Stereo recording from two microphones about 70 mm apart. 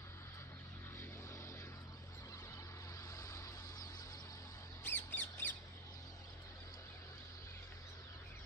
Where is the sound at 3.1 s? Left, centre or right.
Left.